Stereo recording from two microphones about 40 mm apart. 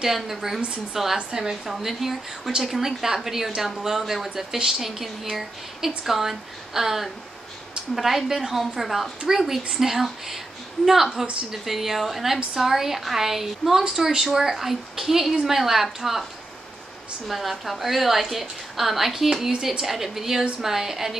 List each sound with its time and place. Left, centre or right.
0.0 s a woman's voice: centre
1.1 s a woman's voice: right
1.5 s a woman's voice: centre
17.3 s a woman's voice: centre